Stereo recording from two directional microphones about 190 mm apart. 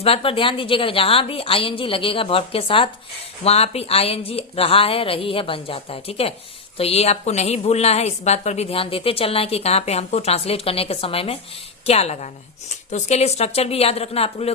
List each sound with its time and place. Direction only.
0.0 s a woman's voice: 30° left (ahead or behind)